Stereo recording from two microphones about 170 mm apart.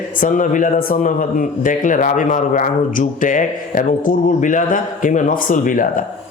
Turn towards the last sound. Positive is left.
turn(degrees=50)  # may be behind; listen again after turning